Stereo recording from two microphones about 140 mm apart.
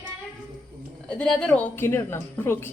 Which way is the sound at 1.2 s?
5° left (ahead or behind).